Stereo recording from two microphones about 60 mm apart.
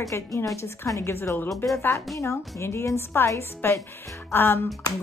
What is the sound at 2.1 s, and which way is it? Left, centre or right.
A woman's voice, left.